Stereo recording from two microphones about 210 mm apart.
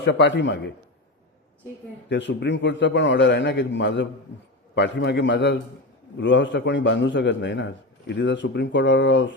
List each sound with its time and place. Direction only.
0.0 s a man's voice: 55° left (ahead or behind)
2.0 s a man's voice: 55° left (ahead or behind)